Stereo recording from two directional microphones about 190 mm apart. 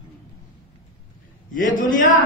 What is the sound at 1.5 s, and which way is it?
Speech, 45° left (ahead or behind).